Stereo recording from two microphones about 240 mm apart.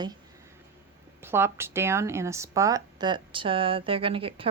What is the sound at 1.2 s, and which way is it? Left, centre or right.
Speech, centre.